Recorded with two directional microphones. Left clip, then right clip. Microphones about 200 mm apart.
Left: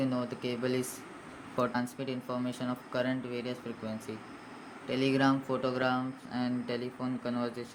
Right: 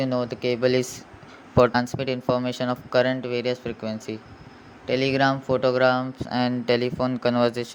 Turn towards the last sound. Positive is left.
turn(degrees=-50)  # may be behind; listen again after turning